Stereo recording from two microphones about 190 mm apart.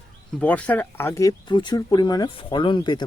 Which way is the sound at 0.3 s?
10° left (ahead or behind).